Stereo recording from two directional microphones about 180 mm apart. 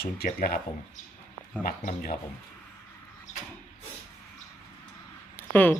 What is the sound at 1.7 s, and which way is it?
Speech, 50° left (ahead or behind).